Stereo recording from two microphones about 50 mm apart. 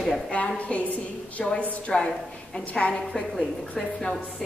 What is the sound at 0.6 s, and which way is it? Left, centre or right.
A woman's voice, left.